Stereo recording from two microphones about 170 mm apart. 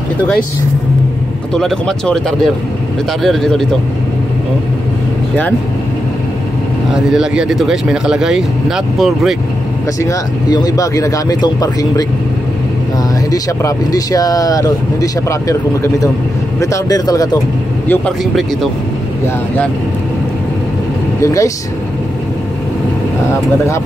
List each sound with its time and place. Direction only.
1.5 s speech: 5° left (ahead or behind)
7.1 s speech: 5° right (ahead or behind)
10.0 s speech: 20° left (ahead or behind)
13.3 s speech: 20° left (ahead or behind)
17.8 s speech: 5° left (ahead or behind)
21.2 s speech: 20° left (ahead or behind)